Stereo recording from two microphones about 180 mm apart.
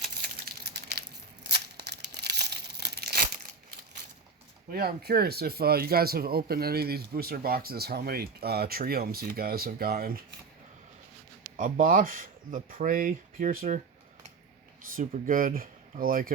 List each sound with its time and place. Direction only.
0.2 s crumpling: 65° right (ahead or behind)
4.7 s speech: 60° right (ahead or behind)
11.5 s speech: 45° right (ahead or behind)
14.9 s speech: 50° right (ahead or behind)